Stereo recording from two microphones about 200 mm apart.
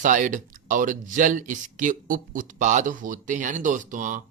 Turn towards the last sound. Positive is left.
turn(degrees=-40)  # may be behind; listen again after turning